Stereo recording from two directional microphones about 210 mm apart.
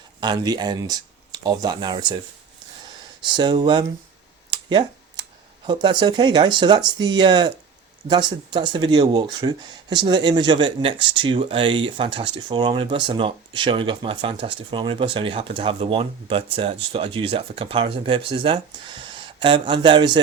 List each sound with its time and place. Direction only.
0.2 s speech: 20° right (ahead or behind)
3.3 s speech: 20° right (ahead or behind)
4.7 s a sound: 20° right (ahead or behind)
5.6 s speech: 20° right (ahead or behind)